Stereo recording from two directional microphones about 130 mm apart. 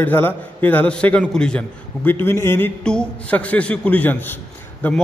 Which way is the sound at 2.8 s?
5° left (ahead or behind).